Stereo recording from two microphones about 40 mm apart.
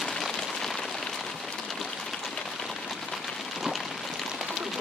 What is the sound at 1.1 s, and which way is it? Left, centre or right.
Rain on surface, centre.